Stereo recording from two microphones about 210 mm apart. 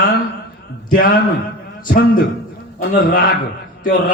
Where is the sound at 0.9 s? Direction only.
45° left (ahead or behind).